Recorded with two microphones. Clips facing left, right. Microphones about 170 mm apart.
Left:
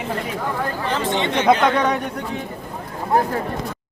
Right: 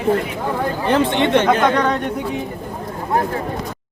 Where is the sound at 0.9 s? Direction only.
60° right (ahead or behind).